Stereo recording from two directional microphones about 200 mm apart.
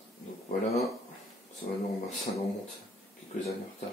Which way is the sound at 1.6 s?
30° left (ahead or behind).